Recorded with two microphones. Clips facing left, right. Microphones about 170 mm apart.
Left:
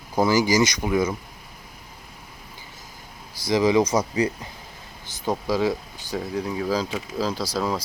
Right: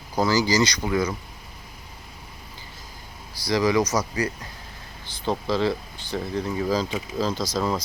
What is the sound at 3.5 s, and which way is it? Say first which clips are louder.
Speech: left 2 dB; 20° left (ahead or behind).